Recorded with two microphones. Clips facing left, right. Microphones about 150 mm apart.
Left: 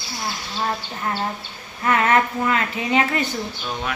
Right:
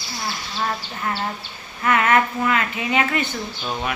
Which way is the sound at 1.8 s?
30° left (ahead or behind).